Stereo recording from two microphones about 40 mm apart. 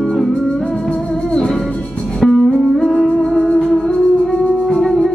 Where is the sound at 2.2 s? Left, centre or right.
Centre.